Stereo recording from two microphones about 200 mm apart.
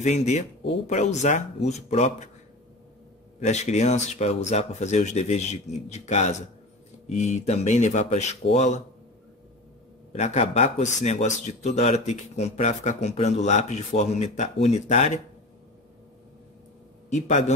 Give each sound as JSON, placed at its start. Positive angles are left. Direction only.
{"t": 0.0, "sound": "speech", "side_deg": 35}
{"t": 3.3, "sound": "speech", "side_deg": 35}
{"t": 10.1, "sound": "speech", "side_deg": 35}
{"t": 17.1, "sound": "speech", "side_deg": 35}